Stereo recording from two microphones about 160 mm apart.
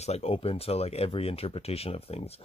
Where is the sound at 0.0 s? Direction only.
40° left (ahead or behind).